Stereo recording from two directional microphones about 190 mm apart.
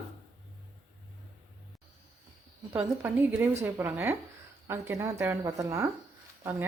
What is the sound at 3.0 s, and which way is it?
A woman's voice, 15° right (ahead or behind).